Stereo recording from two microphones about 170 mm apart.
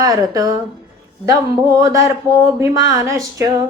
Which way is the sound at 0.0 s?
20° right (ahead or behind).